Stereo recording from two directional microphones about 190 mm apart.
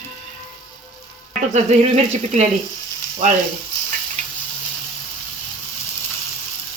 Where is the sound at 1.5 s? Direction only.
35° right (ahead or behind).